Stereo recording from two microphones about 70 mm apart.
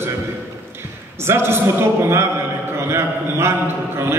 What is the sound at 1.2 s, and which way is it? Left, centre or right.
A man's voice, right.